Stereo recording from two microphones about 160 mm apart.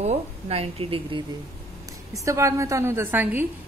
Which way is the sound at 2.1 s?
20° right (ahead or behind).